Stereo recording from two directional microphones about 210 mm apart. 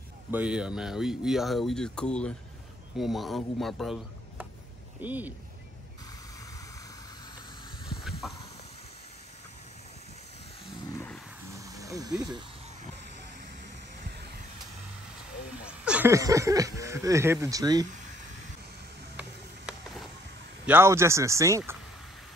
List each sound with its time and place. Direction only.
0.3 s a man's voice: 5° right (ahead or behind)
8.2 s a sound: centre (ahead or behind)
11.5 s snake: 15° right (ahead or behind)
15.6 s speech: 5° right (ahead or behind)
19.1 s music: centre (ahead or behind)
20.6 s speech: 10° right (ahead or behind)